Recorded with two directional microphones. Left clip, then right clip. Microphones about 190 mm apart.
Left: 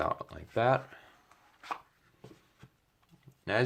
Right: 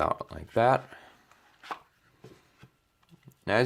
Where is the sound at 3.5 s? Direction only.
40° right (ahead or behind).